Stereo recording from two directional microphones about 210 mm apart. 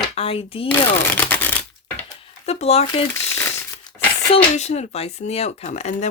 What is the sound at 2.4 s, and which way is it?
Speech, 30° left (ahead or behind).